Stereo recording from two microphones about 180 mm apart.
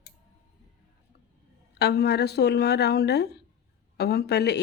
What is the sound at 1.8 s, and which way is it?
A woman's voice, 65° left (ahead or behind).